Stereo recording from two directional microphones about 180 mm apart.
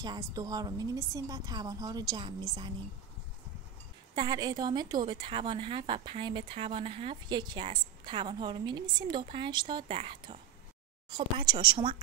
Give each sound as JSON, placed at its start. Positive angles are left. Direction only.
{"t": 0.0, "sound": "a woman's voice", "side_deg": -20}
{"t": 4.1, "sound": "a woman's voice", "side_deg": -25}